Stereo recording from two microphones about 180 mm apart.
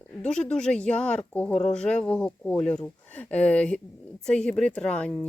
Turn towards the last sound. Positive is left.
turn(degrees=5)  # may be behind; listen again after turning